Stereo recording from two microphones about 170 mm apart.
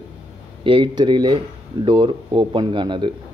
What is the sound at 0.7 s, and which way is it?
Speech, 30° right (ahead or behind).